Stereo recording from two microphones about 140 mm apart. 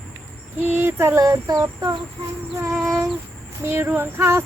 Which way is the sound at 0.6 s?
15° right (ahead or behind).